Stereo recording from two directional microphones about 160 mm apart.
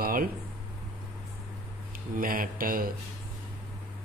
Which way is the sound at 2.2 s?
60° right (ahead or behind).